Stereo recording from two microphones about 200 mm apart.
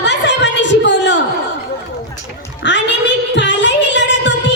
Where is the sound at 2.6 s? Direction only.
65° left (ahead or behind).